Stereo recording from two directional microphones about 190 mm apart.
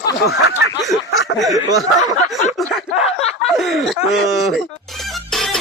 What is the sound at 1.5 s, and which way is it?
Speech, 20° right (ahead or behind).